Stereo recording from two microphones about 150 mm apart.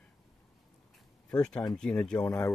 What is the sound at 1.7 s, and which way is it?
Speech, 5° left (ahead or behind).